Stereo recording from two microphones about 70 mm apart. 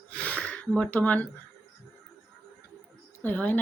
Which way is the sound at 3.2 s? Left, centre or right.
Left.